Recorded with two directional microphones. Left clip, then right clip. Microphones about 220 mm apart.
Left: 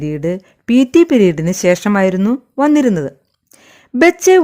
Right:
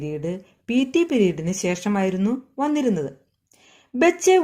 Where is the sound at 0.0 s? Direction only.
45° left (ahead or behind).